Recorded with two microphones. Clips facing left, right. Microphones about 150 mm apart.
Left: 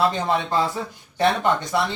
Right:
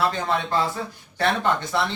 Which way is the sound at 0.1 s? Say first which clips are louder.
Left 2 dB; 15° left (ahead or behind).